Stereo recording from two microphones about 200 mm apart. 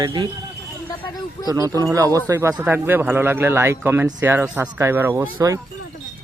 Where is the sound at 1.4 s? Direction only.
15° right (ahead or behind).